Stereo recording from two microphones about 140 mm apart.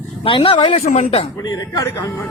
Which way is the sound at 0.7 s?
60° left (ahead or behind).